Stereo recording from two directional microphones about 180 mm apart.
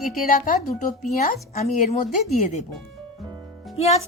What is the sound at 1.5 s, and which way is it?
Speech, 35° left (ahead or behind).